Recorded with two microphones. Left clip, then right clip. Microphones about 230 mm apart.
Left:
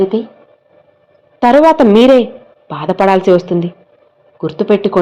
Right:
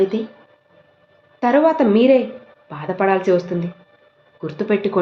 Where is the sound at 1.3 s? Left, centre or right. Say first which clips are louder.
Left 8 dB; left.